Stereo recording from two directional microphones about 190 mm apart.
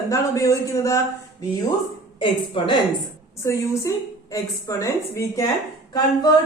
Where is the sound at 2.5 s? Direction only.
25° left (ahead or behind).